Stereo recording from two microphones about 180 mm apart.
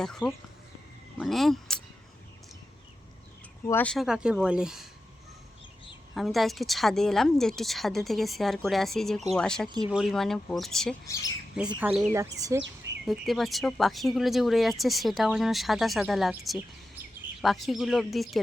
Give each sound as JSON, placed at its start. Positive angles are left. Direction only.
{"t": 0.0, "sound": "speech", "side_deg": 5}
{"t": 3.7, "sound": "speech", "side_deg": 10}
{"t": 3.9, "sound": "speech", "side_deg": -5}
{"t": 6.1, "sound": "speech", "side_deg": 0}
{"t": 11.8, "sound": "speech", "side_deg": -10}
{"t": 12.5, "sound": "chirp", "side_deg": -90}
{"t": 13.1, "sound": "speech", "side_deg": 0}